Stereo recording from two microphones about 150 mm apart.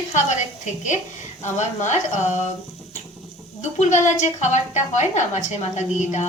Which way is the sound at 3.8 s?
50° left (ahead or behind).